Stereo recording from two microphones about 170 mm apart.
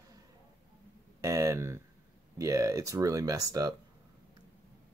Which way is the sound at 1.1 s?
20° right (ahead or behind).